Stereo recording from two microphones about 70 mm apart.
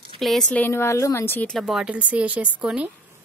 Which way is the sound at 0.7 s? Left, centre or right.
Left.